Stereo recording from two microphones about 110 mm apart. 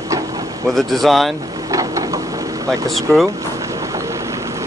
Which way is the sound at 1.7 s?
30° right (ahead or behind).